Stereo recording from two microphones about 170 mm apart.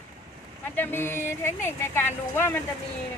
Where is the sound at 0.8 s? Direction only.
15° left (ahead or behind).